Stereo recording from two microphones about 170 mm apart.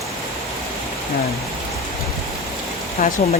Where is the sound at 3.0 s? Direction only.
50° left (ahead or behind).